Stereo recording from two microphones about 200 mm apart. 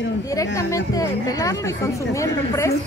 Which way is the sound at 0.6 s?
15° left (ahead or behind).